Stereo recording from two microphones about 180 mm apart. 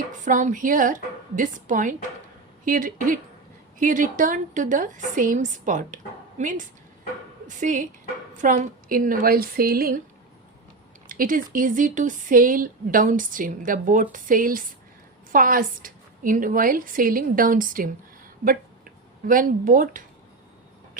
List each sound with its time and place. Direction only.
0.1 s a woman's voice: 45° right (ahead or behind)
11.1 s speech: 50° right (ahead or behind)